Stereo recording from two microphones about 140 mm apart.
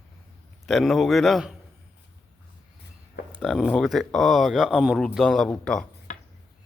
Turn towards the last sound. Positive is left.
turn(degrees=65)  # may be behind; listen again after turning